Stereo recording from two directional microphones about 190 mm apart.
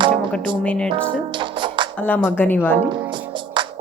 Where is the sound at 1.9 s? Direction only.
10° left (ahead or behind).